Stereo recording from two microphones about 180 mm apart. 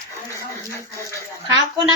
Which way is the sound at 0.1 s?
15° left (ahead or behind).